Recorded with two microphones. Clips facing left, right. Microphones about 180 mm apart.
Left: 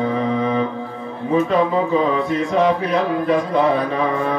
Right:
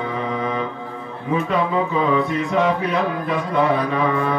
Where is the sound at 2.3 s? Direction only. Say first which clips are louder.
Left 2 dB; 35° left (ahead or behind).